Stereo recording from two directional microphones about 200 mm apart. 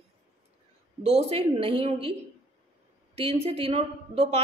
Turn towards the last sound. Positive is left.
turn(degrees=-30)  # may be behind; listen again after turning